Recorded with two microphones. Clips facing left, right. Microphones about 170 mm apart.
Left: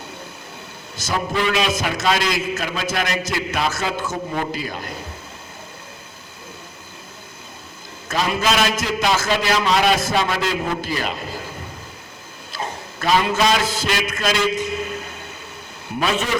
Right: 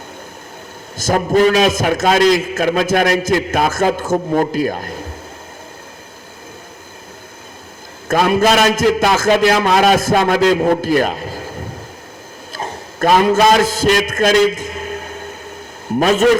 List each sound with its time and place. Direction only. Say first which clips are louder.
0.9 s a man's voice: right 9 dB; 50° right (ahead or behind)
8.0 s a man's voice: right 8 dB; 50° right (ahead or behind)
12.5 s a sound: right 5 dB; 50° right (ahead or behind)
16.0 s a man's voice: right 10 dB; 45° right (ahead or behind)